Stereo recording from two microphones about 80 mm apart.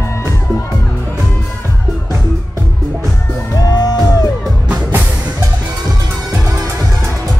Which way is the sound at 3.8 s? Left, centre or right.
Left.